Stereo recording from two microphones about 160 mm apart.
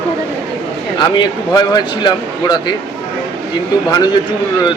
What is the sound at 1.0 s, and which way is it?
A man's voice, 25° left (ahead or behind).